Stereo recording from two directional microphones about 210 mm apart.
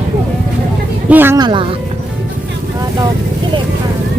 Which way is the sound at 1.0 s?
10° right (ahead or behind).